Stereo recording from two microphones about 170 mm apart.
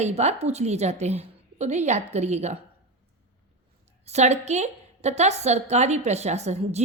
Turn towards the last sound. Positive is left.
turn(degrees=-40)  # may be behind; listen again after turning